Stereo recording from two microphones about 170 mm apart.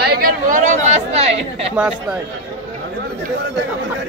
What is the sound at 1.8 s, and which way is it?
Speech, 5° right (ahead or behind).